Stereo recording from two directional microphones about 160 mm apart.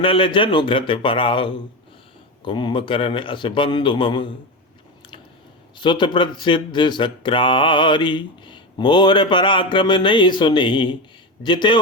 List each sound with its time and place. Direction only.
0.0 s a man's voice: 35° left (ahead or behind)
5.7 s mantra: 30° left (ahead or behind)